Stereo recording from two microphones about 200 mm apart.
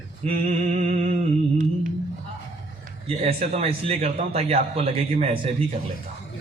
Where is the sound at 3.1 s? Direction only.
30° right (ahead or behind).